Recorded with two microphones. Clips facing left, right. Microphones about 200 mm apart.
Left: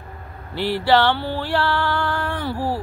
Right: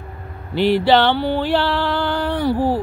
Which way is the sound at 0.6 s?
20° right (ahead or behind).